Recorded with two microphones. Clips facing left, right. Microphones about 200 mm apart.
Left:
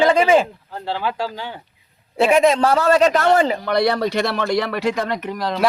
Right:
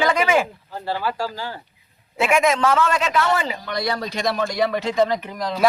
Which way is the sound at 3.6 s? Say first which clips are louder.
Left 7 dB; 65° left (ahead or behind).